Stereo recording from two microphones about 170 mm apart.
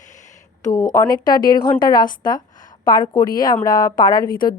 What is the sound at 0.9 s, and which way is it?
A woman's voice, 25° left (ahead or behind).